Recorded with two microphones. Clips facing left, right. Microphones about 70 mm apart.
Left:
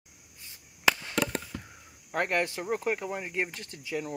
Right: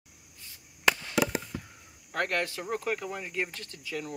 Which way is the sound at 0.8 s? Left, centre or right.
Centre.